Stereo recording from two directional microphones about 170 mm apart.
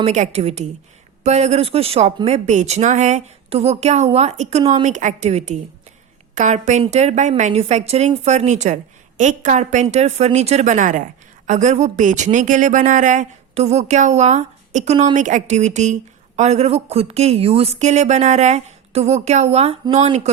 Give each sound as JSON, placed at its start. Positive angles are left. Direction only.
{"t": 0.0, "sound": "a woman's voice", "side_deg": -45}